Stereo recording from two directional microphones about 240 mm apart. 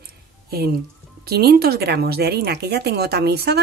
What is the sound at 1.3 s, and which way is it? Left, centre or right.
A woman's voice, right.